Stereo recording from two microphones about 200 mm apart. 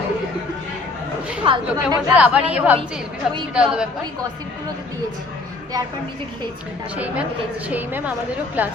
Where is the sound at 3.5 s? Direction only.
5° right (ahead or behind).